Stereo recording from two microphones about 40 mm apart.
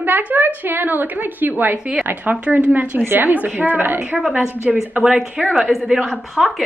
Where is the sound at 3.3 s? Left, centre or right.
Right.